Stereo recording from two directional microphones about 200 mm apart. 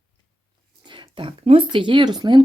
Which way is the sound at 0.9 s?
25° right (ahead or behind).